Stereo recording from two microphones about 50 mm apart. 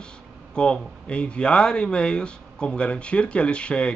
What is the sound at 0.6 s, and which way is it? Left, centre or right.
Speech, left.